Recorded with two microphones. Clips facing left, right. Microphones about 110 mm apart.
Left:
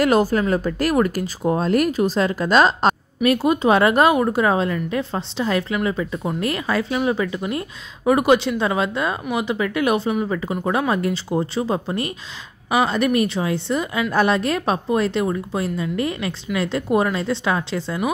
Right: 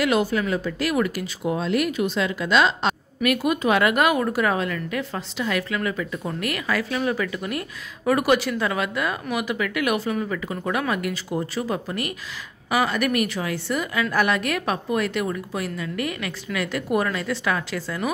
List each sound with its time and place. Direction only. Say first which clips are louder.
0.0 s speech: left 4 dB; 40° left (ahead or behind)
3.2 s a woman's voice: left 3 dB; 30° left (ahead or behind)